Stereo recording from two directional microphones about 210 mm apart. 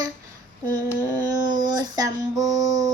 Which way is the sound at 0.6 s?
10° left (ahead or behind).